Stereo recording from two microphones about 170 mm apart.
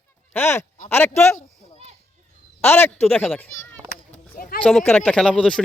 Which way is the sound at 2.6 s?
15° left (ahead or behind).